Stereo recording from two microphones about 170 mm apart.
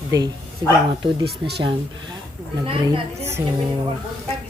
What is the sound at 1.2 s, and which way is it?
Speech, 70° right (ahead or behind).